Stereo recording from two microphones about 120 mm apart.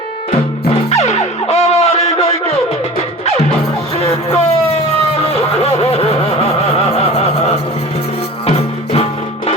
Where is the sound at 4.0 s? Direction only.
60° left (ahead or behind).